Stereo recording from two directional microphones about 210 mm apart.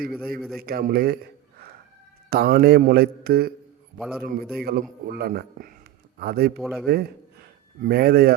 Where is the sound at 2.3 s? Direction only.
45° right (ahead or behind).